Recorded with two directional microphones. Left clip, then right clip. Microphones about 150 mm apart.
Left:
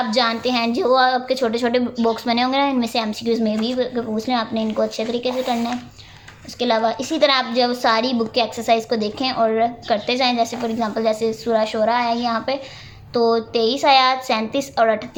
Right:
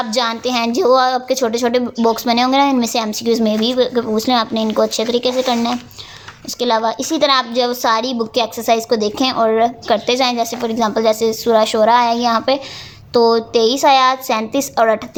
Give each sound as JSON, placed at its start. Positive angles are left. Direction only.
{"t": 0.1, "sound": "a woman's voice", "side_deg": -40}